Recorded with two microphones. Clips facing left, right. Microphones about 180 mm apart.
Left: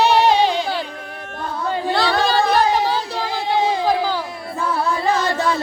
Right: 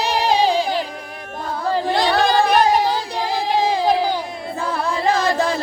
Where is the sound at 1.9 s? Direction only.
20° right (ahead or behind).